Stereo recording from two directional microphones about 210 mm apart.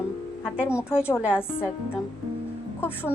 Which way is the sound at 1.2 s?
10° left (ahead or behind).